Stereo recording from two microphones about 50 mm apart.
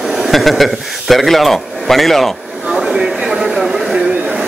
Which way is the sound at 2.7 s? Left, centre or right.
Centre.